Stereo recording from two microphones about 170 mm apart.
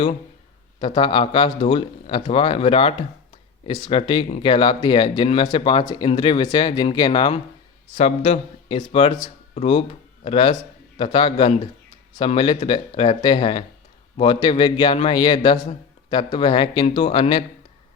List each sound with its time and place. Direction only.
0.8 s a man's voice: 30° left (ahead or behind)